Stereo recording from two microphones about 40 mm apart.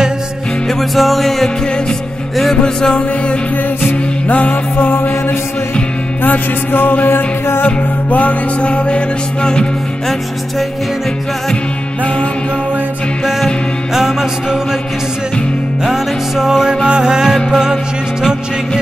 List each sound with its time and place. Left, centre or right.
0.7 s music: centre
2.5 s music: centre
3.8 s music: left
6.2 s music: left
7.6 s music: left
13.9 s music: centre
15.8 s music: centre